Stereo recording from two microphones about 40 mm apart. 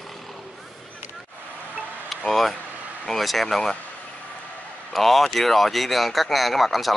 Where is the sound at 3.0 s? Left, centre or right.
Centre.